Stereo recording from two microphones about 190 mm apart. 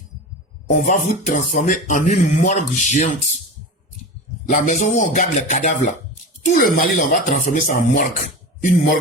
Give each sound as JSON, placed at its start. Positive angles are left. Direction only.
{"t": 0.7, "sound": "speech", "side_deg": 40}
{"t": 4.4, "sound": "speech", "side_deg": 40}